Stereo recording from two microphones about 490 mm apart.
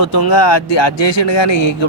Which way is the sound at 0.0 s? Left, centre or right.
Left.